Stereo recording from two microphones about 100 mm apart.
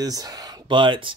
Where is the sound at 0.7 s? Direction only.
55° right (ahead or behind).